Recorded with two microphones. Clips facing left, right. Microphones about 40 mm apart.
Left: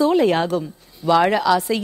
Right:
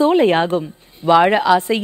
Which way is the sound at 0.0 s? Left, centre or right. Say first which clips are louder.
Right 3 dB; right.